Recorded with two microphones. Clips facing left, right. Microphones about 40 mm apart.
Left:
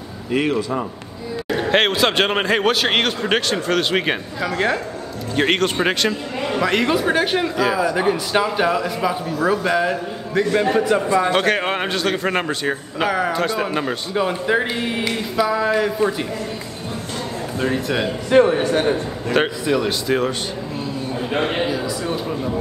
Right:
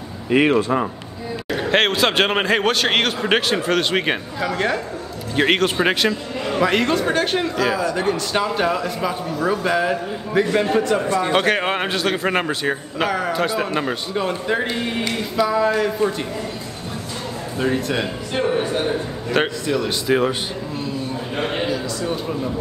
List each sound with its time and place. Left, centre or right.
0.3 s a man's voice: right
1.5 s a man's voice: centre
6.9 s a man's voice: centre
10.6 s a man's voice: centre
11.2 s a man's voice: centre
13.1 s a man's voice: centre
14.1 s a man's voice: centre
17.6 s a man's voice: centre
18.3 s a man's voice: left
19.3 s a man's voice: centre
19.9 s speech: centre
21.6 s a man's voice: centre